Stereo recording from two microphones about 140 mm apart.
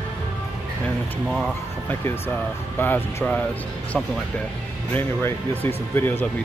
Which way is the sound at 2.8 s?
15° left (ahead or behind).